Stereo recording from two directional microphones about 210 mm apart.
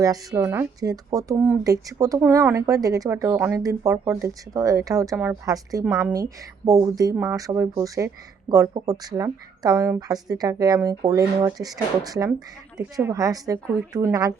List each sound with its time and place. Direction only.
0.0 s speech: 15° right (ahead or behind)